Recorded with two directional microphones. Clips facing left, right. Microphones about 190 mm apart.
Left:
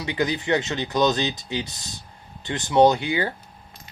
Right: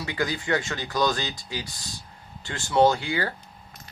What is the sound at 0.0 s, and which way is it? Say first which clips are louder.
Speech: left 4 dB; 20° left (ahead or behind).